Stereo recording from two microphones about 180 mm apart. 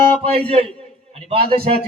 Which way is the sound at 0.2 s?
30° right (ahead or behind).